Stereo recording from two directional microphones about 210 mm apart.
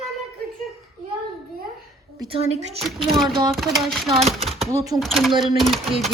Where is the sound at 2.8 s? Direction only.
Centre (ahead or behind).